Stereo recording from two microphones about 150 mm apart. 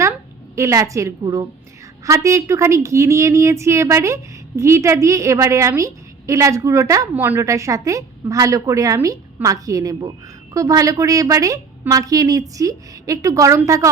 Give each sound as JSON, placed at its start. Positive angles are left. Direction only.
{"t": 0.5, "sound": "a woman's voice", "side_deg": -20}